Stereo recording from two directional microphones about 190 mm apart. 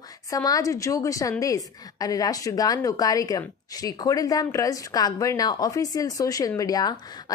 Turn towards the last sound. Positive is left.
turn(degrees=20)  # may be behind; listen again after turning